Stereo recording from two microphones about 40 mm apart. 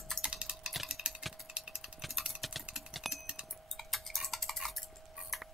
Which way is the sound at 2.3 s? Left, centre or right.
Centre.